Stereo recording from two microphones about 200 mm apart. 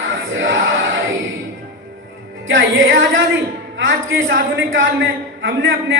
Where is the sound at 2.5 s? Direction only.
75° right (ahead or behind).